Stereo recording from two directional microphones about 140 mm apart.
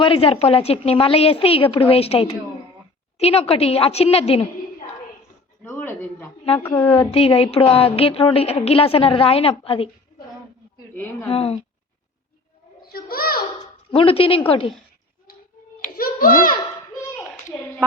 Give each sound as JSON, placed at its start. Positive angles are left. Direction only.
{"t": 0.0, "sound": "a woman's voice", "side_deg": 40}
{"t": 5.6, "sound": "speech", "side_deg": 15}
{"t": 6.9, "sound": "a woman's voice", "side_deg": 45}
{"t": 11.3, "sound": "a woman's voice", "side_deg": 45}
{"t": 12.8, "sound": "a sound", "side_deg": 90}
{"t": 13.9, "sound": "speech", "side_deg": 40}
{"t": 15.3, "sound": "tick-tock", "side_deg": 90}
{"t": 16.0, "sound": "a sound", "side_deg": 90}